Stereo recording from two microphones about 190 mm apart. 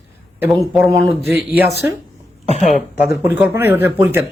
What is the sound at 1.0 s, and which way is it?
Speech, 60° left (ahead or behind).